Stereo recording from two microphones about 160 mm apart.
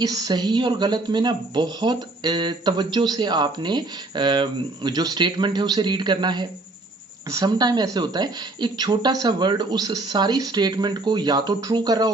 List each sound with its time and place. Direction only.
0.0 s speech: 25° right (ahead or behind)